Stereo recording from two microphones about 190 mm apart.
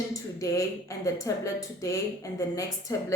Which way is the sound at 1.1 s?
15° left (ahead or behind).